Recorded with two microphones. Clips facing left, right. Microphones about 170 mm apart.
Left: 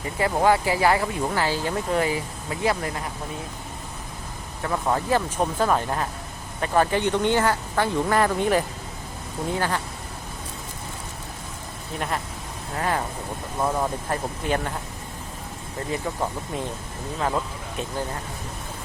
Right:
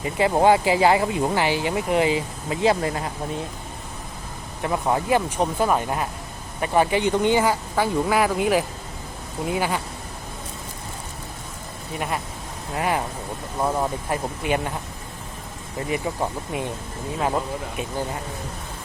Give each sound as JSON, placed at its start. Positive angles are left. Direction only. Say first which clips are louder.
{"t": 0.0, "sound": "speech", "louder": "right 3 dB", "side_deg": -20}
{"t": 4.6, "sound": "speech", "louder": "right 2 dB", "side_deg": -15}
{"t": 11.9, "sound": "speech", "louder": "right 1 dB", "side_deg": -5}
{"t": 15.9, "sound": "speech", "louder": "right 2 dB", "side_deg": -10}